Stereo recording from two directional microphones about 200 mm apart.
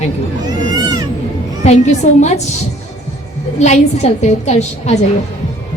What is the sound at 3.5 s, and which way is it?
Speech, 35° left (ahead or behind).